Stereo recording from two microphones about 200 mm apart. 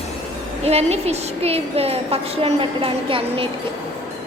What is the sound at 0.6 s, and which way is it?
A woman's voice, 30° right (ahead or behind).